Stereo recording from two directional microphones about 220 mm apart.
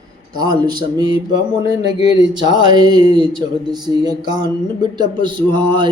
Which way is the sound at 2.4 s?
20° right (ahead or behind).